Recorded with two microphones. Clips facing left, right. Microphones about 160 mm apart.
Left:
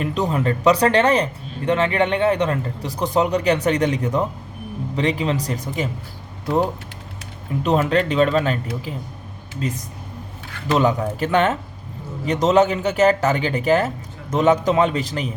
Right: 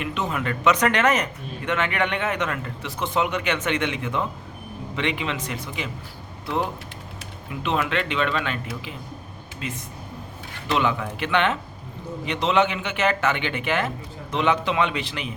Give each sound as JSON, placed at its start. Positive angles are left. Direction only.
{"t": 0.0, "sound": "speech", "side_deg": 35}